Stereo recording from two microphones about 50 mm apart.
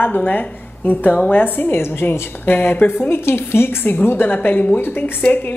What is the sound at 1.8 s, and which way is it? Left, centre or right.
A woman's voice, left.